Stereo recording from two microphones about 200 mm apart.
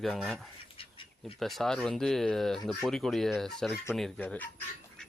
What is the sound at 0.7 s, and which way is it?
Duck, 25° left (ahead or behind).